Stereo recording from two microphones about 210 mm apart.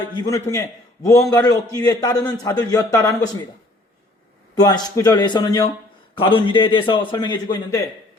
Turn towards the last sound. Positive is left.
turn(degrees=20)  # may be behind; listen again after turning